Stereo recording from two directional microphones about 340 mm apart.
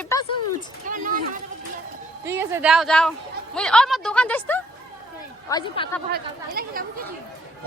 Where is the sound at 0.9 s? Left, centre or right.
Right.